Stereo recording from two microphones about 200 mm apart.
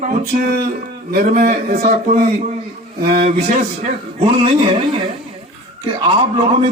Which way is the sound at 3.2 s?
35° right (ahead or behind).